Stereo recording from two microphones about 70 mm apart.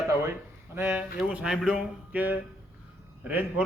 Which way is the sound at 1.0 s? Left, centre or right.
Centre.